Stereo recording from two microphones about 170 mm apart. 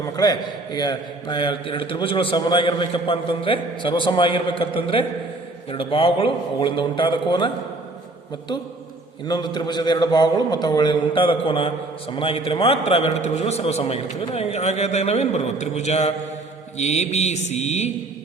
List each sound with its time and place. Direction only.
0.0 s a man's voice: 25° left (ahead or behind)
9.2 s a man's voice: 25° left (ahead or behind); by 17.9 s 40° left (ahead or behind)